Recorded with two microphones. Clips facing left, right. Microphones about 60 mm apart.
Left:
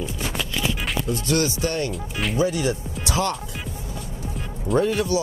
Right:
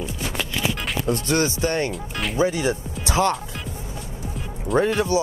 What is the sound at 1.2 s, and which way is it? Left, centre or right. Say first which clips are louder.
Speech: left 1 dB; right.